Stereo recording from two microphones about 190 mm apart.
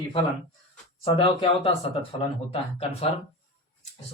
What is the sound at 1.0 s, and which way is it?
Speech, 30° left (ahead or behind).